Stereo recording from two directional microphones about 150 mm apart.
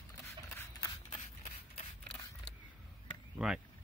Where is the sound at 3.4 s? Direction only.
Centre (ahead or behind).